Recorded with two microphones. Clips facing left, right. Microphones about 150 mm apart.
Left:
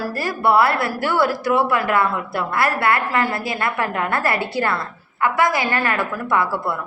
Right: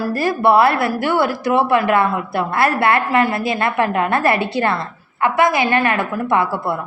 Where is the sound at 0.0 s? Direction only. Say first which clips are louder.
Right 4 dB; 20° right (ahead or behind).